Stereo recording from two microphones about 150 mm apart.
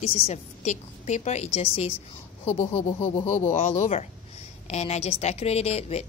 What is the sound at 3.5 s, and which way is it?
A woman's voice, 50° left (ahead or behind).